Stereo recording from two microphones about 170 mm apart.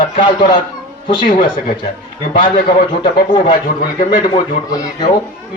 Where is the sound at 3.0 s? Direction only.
30° left (ahead or behind).